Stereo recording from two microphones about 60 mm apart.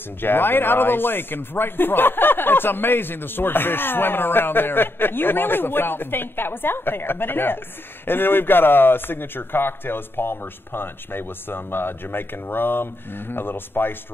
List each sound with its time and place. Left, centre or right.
0.2 s a man's voice: left